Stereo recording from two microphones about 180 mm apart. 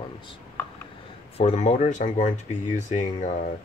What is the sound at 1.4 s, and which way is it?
Speech, 40° left (ahead or behind).